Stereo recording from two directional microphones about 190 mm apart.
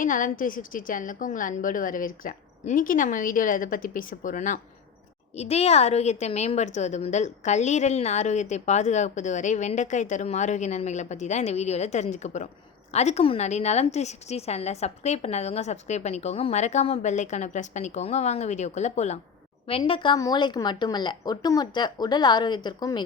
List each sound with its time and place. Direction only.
0.0 s a woman's voice: 45° left (ahead or behind); by 23.0 s 20° left (ahead or behind)